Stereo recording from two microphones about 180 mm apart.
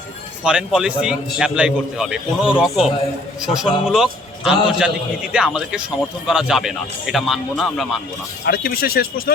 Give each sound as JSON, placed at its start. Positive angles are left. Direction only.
{"t": 0.4, "sound": "a man's voice", "side_deg": -5}
{"t": 8.4, "sound": "speech", "side_deg": 55}